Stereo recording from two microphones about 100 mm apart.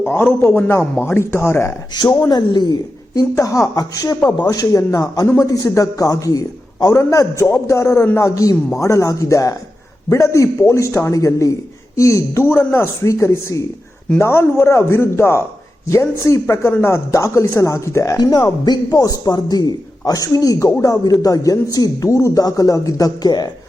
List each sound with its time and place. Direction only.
0.0 s a man's voice: 20° left (ahead or behind)
2.3 s speech: 45° left (ahead or behind)
3.2 s a man's voice: 35° left (ahead or behind)
18.2 s speech: 45° left (ahead or behind)